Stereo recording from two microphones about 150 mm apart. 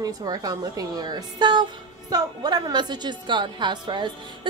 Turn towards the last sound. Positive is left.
turn(degrees=-30)  # may be behind; listen again after turning